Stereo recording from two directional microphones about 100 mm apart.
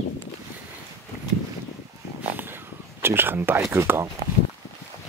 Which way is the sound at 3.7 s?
25° right (ahead or behind).